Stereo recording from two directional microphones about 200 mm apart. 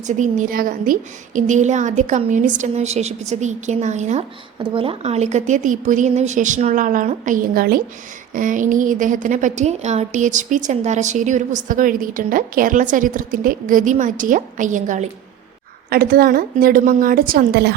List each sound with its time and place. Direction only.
0.0 s a woman's voice: 35° right (ahead or behind); by 17.7 s 55° right (ahead or behind)